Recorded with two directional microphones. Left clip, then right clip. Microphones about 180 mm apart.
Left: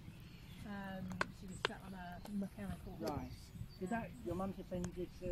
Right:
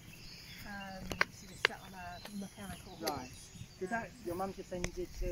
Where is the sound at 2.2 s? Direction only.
70° left (ahead or behind).